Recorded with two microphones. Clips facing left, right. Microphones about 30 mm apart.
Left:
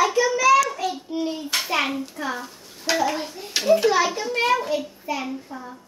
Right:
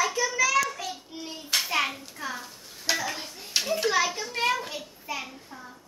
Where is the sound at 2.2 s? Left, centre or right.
Left.